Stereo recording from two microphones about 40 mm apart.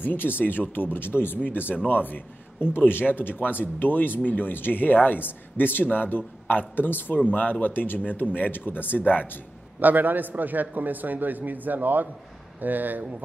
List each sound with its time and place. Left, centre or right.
0.0 s a man's voice: left
9.8 s a man's voice: right